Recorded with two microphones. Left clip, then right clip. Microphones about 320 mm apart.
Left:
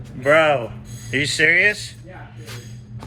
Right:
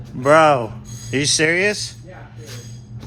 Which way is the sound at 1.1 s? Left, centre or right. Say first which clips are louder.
Left 1 dB; centre.